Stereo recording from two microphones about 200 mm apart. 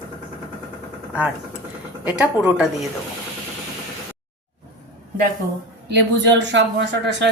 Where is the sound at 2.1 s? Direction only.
5° right (ahead or behind).